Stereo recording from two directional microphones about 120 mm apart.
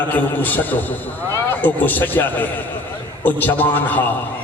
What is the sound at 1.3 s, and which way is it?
A man's voice, 15° left (ahead or behind).